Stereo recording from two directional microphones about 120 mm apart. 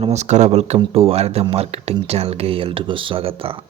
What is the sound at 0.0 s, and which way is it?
Speech, 70° right (ahead or behind).